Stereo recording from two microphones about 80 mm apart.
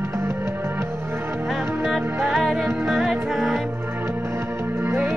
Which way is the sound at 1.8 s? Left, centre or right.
Centre.